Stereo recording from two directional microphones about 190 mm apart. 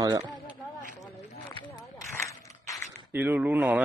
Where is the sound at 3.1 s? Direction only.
10° right (ahead or behind).